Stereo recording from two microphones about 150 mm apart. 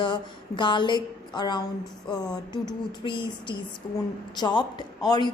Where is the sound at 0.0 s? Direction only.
30° left (ahead or behind).